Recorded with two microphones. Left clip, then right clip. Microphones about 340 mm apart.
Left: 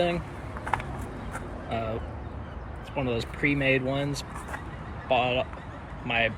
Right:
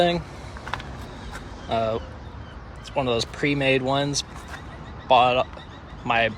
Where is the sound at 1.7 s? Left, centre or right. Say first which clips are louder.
Right 8 dB; centre.